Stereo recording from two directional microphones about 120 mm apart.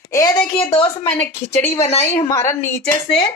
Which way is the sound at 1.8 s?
60° left (ahead or behind).